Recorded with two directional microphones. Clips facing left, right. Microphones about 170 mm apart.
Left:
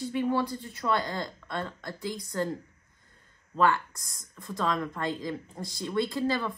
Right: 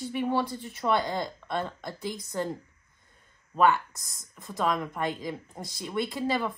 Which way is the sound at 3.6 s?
20° right (ahead or behind).